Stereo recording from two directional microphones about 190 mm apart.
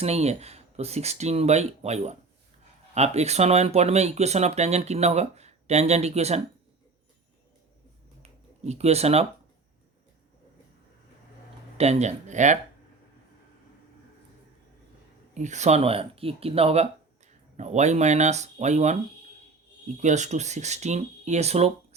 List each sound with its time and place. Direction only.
0.0 s speech: 35° right (ahead or behind)
8.2 s a sound: 35° right (ahead or behind)
11.8 s speech: 35° right (ahead or behind)
15.4 s speech: 40° right (ahead or behind)
20.0 s speech: 40° right (ahead or behind)